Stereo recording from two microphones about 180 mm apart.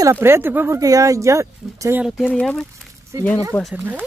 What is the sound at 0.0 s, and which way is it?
Speech, 15° right (ahead or behind).